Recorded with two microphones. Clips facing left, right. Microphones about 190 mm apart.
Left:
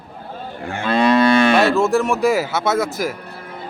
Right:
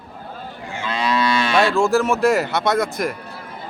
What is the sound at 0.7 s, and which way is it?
Moo, 55° left (ahead or behind).